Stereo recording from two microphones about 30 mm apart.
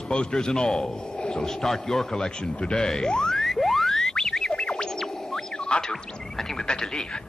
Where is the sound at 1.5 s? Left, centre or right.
Centre.